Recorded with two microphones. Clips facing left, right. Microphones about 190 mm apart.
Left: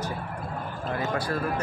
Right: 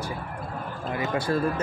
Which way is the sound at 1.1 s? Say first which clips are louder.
Right 3 dB; 25° right (ahead or behind).